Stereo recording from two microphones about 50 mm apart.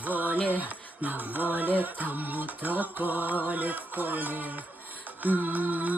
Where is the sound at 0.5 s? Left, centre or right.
Right.